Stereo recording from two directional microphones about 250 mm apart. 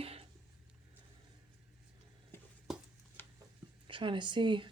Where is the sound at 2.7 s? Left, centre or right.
Centre.